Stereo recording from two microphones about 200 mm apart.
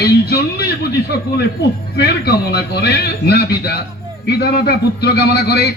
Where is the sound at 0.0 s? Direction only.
50° left (ahead or behind).